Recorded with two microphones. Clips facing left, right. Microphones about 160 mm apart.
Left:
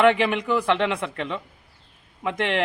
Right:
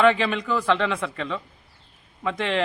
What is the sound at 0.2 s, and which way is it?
A man's voice, 15° left (ahead or behind).